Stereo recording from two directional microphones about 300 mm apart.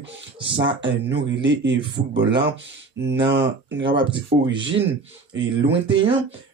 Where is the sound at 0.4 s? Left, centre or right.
Centre.